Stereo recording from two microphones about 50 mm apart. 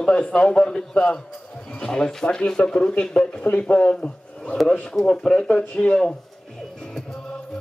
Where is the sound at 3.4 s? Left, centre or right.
Left.